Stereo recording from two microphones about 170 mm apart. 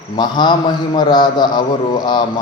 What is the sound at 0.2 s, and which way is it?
A man's voice, 25° left (ahead or behind).